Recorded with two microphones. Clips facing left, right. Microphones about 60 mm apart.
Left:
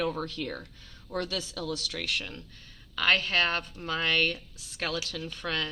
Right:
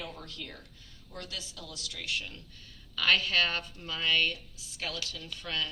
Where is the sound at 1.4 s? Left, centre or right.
Left.